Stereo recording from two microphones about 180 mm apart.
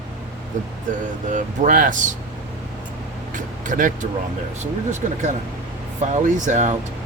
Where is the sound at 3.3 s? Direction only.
45° right (ahead or behind).